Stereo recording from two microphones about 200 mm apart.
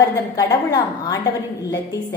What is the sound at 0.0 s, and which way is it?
A woman's voice, 20° left (ahead or behind).